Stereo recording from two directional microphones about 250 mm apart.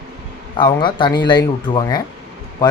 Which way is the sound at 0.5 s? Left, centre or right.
Centre.